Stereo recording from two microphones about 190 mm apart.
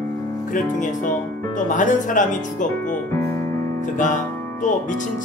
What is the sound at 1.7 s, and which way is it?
Speech, 45° left (ahead or behind).